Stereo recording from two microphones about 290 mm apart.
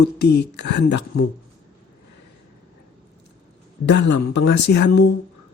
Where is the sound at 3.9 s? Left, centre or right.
Left.